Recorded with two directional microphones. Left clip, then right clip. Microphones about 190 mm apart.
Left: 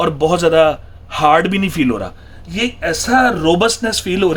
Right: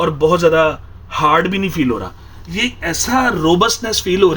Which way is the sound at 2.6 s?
15° left (ahead or behind).